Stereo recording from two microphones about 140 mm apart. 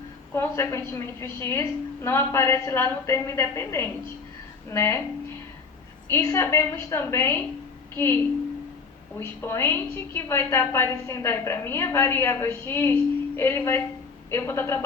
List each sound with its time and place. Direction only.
0.3 s a woman's voice: 20° left (ahead or behind)
6.1 s a woman's voice: 20° left (ahead or behind)